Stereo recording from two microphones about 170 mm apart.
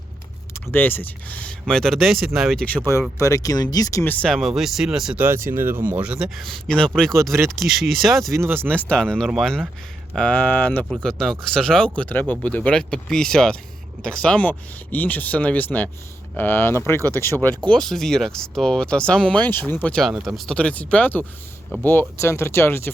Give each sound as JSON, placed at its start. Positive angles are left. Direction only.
{"t": 0.7, "sound": "speech", "side_deg": 10}
{"t": 4.0, "sound": "speech", "side_deg": 10}
{"t": 8.3, "sound": "speech", "side_deg": -15}
{"t": 8.8, "sound": "speech", "side_deg": 5}